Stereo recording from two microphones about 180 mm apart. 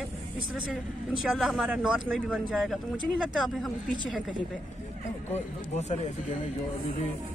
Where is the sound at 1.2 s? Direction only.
Centre (ahead or behind).